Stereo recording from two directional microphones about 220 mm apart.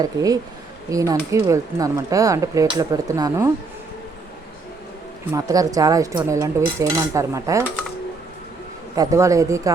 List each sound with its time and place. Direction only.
0.0 s speech: 15° right (ahead or behind)
5.3 s speech: 15° right (ahead or behind)
9.0 s speech: 15° right (ahead or behind)